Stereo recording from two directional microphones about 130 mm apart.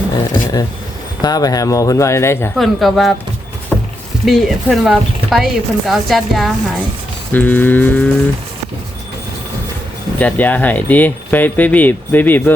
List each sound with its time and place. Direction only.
1.2 s speech: 30° left (ahead or behind)
2.6 s speech: centre (ahead or behind)
3.7 s a sound: 10° left (ahead or behind)
4.3 s speech: centre (ahead or behind)
7.3 s speech: 15° left (ahead or behind)
10.2 s speech: 10° left (ahead or behind)